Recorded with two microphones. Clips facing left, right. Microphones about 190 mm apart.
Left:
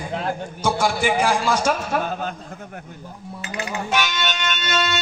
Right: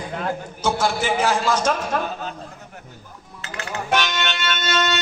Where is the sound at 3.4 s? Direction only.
15° left (ahead or behind).